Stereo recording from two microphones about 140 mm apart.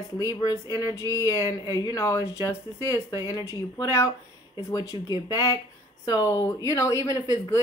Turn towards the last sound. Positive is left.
turn(degrees=25)  # may be behind; listen again after turning